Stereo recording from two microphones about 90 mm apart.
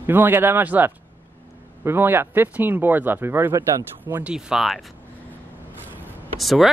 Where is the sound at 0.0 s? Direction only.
25° right (ahead or behind).